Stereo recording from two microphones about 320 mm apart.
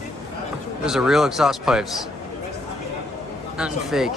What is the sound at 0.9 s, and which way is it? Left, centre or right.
Speech, centre.